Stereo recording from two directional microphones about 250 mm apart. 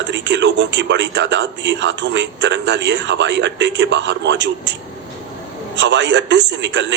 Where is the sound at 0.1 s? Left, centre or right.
Right.